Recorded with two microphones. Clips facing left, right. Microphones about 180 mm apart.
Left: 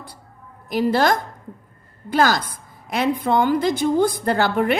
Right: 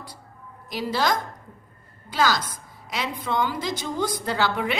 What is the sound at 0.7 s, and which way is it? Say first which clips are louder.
A woman's voice: left 6 dB; 55° left (ahead or behind).